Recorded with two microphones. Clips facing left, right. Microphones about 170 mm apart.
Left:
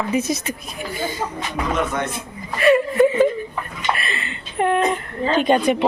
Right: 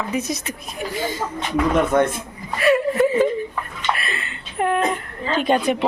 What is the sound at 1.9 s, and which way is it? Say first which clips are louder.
Speech: right 8 dB; 50° right (ahead or behind).